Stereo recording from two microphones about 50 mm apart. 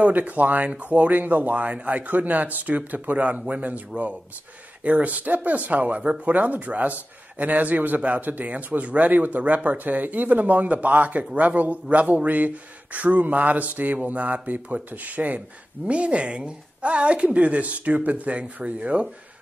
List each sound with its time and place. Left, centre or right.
0.0 s speech: right